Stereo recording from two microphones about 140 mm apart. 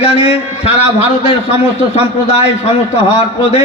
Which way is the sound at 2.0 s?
50° left (ahead or behind).